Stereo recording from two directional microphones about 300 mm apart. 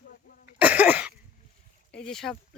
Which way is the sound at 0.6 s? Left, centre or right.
Centre.